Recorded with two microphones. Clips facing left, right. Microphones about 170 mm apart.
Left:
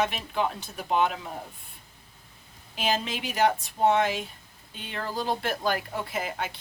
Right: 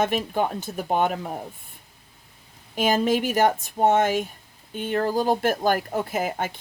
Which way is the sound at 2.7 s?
50° right (ahead or behind).